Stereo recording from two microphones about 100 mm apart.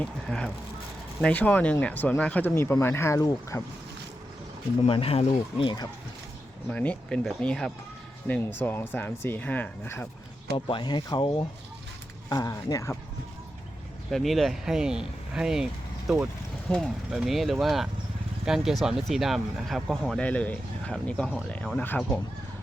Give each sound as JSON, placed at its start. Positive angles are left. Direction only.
{"t": 0.0, "sound": "speech", "side_deg": 10}
{"t": 4.9, "sound": "speech", "side_deg": 70}
{"t": 6.7, "sound": "speech", "side_deg": 10}
{"t": 8.3, "sound": "speech", "side_deg": 20}
{"t": 10.7, "sound": "speech", "side_deg": 50}
{"t": 12.3, "sound": "speech", "side_deg": 35}
{"t": 14.1, "sound": "speech", "side_deg": 0}
{"t": 16.6, "sound": "speech", "side_deg": 5}
{"t": 17.1, "sound": "speech", "side_deg": -5}
{"t": 20.2, "sound": "speech", "side_deg": 15}